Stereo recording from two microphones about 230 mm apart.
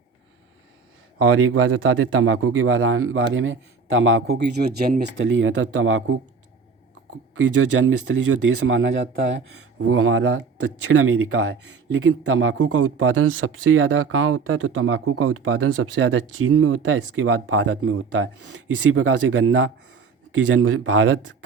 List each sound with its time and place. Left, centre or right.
1.2 s a man's voice: right
7.3 s a man's voice: right